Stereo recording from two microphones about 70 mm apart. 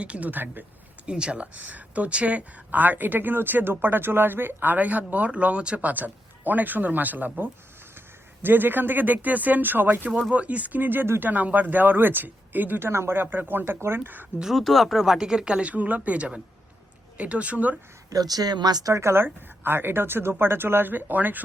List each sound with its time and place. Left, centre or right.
0.0 s speech: centre
1.0 s speech: centre
14.5 s speech: centre; by 17.7 s right
18.1 s speech: right
18.9 s speech: right